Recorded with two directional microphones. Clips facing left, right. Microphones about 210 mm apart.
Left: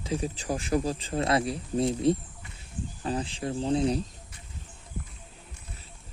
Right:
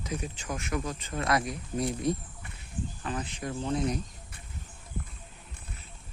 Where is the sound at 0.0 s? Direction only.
30° left (ahead or behind).